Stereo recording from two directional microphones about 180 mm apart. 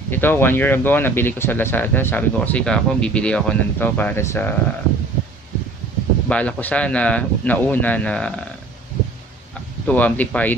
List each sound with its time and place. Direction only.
0.1 s speech: 10° left (ahead or behind)
6.2 s speech: 5° left (ahead or behind)
9.8 s speech: 10° left (ahead or behind)